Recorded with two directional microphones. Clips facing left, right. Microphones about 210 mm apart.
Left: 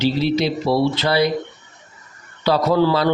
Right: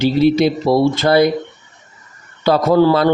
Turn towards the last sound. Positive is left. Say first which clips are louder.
# right 4 dB
turn(degrees=-50)  # may be behind; listen again after turning